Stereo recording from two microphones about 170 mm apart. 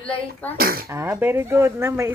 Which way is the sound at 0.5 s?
60° right (ahead or behind).